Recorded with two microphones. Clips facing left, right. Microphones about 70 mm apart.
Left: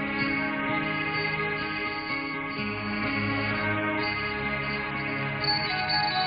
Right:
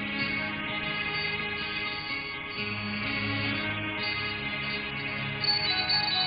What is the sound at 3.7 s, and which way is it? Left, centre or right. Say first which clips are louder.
Music: left 6 dB; left.